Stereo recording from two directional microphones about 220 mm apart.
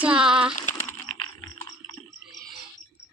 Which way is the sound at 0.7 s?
10° left (ahead or behind).